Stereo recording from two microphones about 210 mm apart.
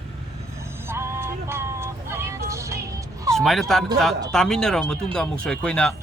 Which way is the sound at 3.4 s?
Centre (ahead or behind).